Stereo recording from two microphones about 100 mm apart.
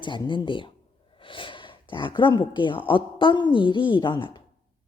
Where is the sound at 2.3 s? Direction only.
45° left (ahead or behind).